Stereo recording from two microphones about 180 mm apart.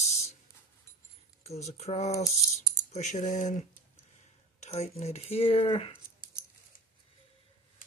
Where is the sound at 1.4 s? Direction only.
35° left (ahead or behind).